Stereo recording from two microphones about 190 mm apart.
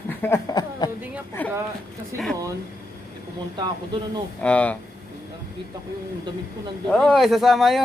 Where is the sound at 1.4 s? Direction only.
10° left (ahead or behind).